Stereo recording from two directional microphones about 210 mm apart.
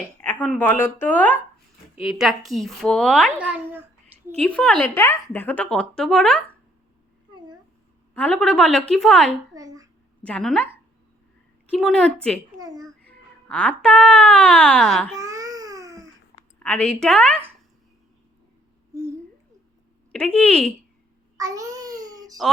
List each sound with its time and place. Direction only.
0.2 s a woman's voice: 5° left (ahead or behind)
2.0 s speech: centre (ahead or behind)
4.4 s speech: 5° left (ahead or behind)
8.1 s speech: 5° left (ahead or behind)
9.6 s a child's voice: 15° right (ahead or behind)
10.2 s speech: 5° left (ahead or behind)
11.7 s speech: 5° left (ahead or behind)
12.5 s babbling: 15° right (ahead or behind)
13.1 s speech: 5° left (ahead or behind)
15.1 s baby cry: 15° right (ahead or behind)
16.6 s speech: 5° left (ahead or behind)
20.1 s speech: 5° left (ahead or behind)
21.3 s babbling: 15° right (ahead or behind)
22.4 s speech: centre (ahead or behind)